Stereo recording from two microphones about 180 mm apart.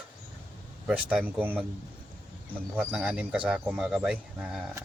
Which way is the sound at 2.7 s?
5° right (ahead or behind).